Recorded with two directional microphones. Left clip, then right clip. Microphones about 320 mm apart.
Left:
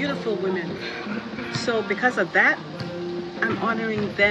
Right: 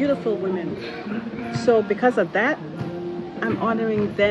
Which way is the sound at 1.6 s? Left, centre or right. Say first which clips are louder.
Right 5 dB; centre.